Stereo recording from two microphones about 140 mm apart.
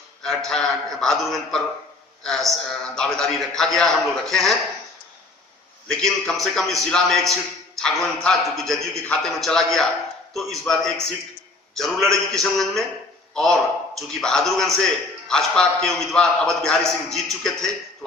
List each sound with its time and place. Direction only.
0.2 s a man's voice: 5° left (ahead or behind)
5.9 s a man's voice: 5° left (ahead or behind)